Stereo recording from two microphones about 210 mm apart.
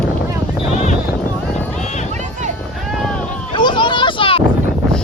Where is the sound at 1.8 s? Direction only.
35° left (ahead or behind).